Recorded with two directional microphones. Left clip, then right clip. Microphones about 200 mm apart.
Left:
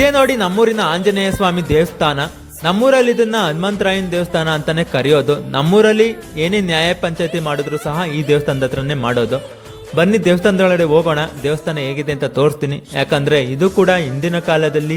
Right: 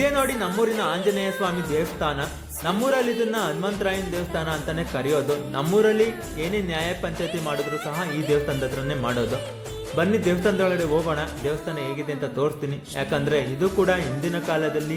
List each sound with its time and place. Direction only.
0.0 s a man's voice: 45° left (ahead or behind)